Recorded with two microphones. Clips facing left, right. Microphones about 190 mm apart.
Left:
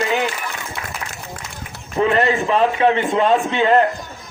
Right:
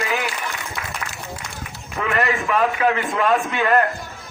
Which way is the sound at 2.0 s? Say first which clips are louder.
Left 5 dB; 30° left (ahead or behind).